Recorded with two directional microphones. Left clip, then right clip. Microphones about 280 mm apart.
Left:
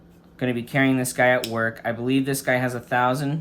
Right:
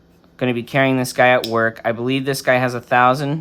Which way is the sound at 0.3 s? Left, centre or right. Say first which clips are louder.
Right 5 dB; centre.